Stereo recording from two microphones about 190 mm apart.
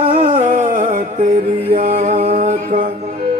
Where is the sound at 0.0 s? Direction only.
40° right (ahead or behind).